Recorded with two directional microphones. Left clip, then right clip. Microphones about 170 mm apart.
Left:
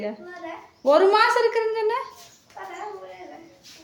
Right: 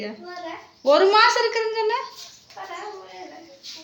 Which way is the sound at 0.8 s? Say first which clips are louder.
Right 1 dB; 10° left (ahead or behind).